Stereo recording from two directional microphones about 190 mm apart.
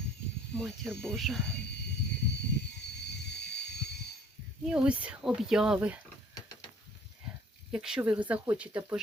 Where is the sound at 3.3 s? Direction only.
60° left (ahead or behind).